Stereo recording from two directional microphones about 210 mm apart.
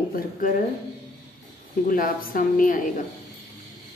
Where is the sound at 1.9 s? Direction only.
40° left (ahead or behind).